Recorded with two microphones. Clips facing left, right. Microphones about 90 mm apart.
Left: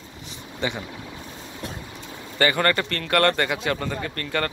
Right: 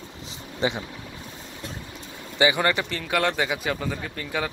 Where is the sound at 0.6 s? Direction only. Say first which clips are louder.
Right 2 dB; 30° right (ahead or behind).